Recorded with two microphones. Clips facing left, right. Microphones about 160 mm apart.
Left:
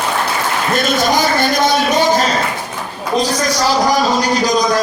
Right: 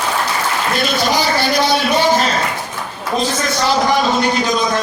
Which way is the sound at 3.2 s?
40° left (ahead or behind).